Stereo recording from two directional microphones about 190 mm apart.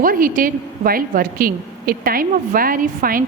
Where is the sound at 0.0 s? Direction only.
45° right (ahead or behind).